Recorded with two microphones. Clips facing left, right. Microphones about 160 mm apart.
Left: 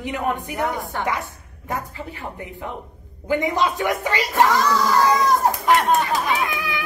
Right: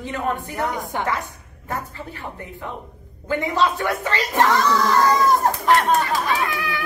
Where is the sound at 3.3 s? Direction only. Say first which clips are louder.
Even; 15° left (ahead or behind).